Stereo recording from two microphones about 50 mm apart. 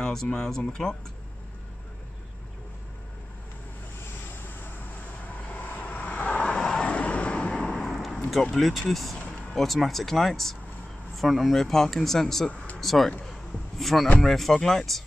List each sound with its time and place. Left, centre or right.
0.0 s speech: centre
4.6 s vehicle: left
6.4 s vehicle: centre
6.9 s vehicle: left
7.7 s a sound: centre
8.3 s speech: centre
12.4 s speech: left
12.8 s speech: centre
13.3 s a sound: centre
14.2 s speech: centre